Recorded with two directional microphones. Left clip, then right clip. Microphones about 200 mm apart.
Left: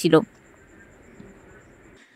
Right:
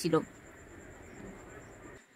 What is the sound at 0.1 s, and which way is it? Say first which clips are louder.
Speech: left 12 dB; 35° left (ahead or behind).